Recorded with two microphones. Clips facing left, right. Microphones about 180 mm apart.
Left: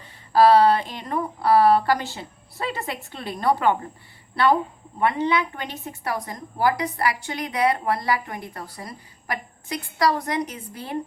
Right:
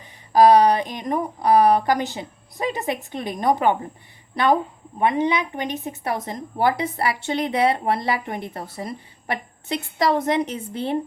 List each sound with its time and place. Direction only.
0.0 s speech: 15° right (ahead or behind)
4.9 s a woman's voice: 15° right (ahead or behind)